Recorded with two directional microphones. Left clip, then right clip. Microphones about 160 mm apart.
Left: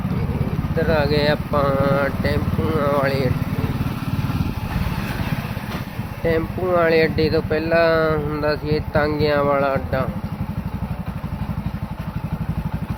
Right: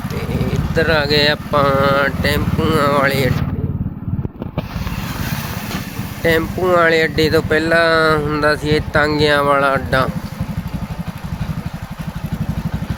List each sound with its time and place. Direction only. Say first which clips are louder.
0.8 s speech: right 5 dB; 10° right (ahead or behind)
6.2 s speech: right 5 dB; 20° right (ahead or behind)